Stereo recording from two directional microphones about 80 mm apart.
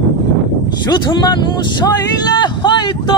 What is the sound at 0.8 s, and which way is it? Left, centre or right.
Speech, left.